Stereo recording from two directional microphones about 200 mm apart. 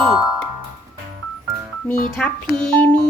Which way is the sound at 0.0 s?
Centre (ahead or behind).